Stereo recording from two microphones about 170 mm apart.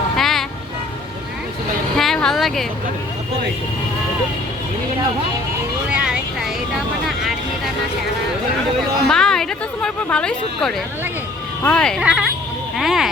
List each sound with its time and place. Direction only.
0.2 s music: centre (ahead or behind)
2.0 s a sound: 5° left (ahead or behind)
5.9 s vehicle: 5° right (ahead or behind)
9.0 s speech: 5° left (ahead or behind)
12.0 s vehicle: 5° right (ahead or behind)
12.7 s speech: centre (ahead or behind)